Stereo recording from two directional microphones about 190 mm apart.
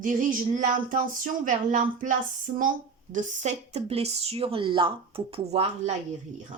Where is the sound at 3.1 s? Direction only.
40° right (ahead or behind).